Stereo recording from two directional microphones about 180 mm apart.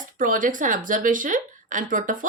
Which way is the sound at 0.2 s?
50° right (ahead or behind).